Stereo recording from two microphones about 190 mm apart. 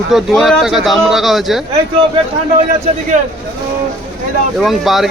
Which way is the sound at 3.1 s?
40° right (ahead or behind).